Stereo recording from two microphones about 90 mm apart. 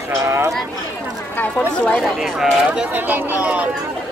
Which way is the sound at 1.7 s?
10° left (ahead or behind).